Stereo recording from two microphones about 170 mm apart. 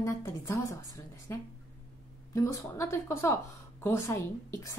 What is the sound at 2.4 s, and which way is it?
A woman's voice, 20° left (ahead or behind).